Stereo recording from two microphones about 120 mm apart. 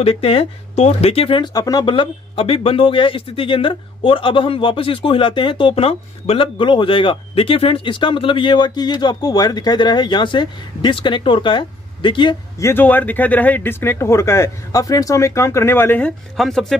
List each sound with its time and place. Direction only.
0.0 s speech: 55° left (ahead or behind)
12.5 s speech: 20° left (ahead or behind)
16.3 s speech: centre (ahead or behind)